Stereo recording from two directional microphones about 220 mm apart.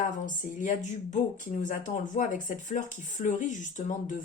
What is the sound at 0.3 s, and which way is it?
A woman's voice, 35° left (ahead or behind).